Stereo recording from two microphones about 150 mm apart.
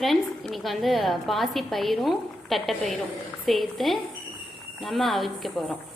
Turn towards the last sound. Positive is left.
turn(degrees=0)  # may be behind; listen again after turning